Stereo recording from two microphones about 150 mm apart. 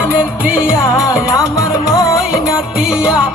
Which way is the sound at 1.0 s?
20° left (ahead or behind).